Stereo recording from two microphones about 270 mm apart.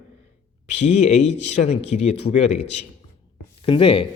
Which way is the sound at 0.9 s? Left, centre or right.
Left.